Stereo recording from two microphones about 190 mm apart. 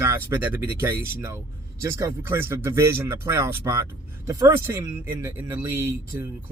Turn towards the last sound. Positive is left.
turn(degrees=-15)  # may be behind; listen again after turning